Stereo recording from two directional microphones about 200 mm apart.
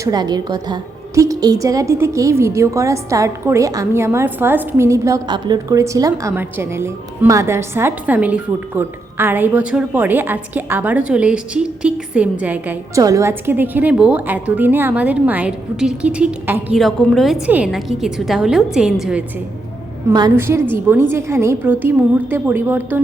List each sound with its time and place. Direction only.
0.0 s a woman's voice: 20° right (ahead or behind); by 19.2 s 5° right (ahead or behind)
20.1 s a woman's voice: 15° right (ahead or behind)